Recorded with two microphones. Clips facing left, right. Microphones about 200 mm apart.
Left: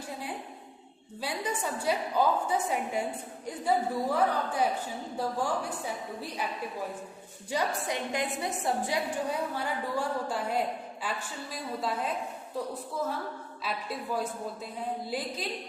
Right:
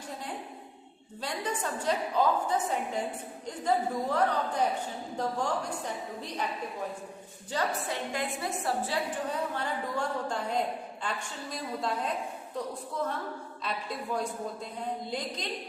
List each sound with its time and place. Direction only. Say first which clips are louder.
1.2 s a woman's voice: left 1 dB; 10° left (ahead or behind)
7.5 s a woman's voice: left 1 dB; 15° left (ahead or behind)
13.7 s a woman's voice: even; 5° left (ahead or behind)